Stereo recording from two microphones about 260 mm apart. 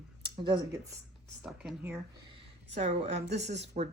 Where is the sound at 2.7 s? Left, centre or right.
Right.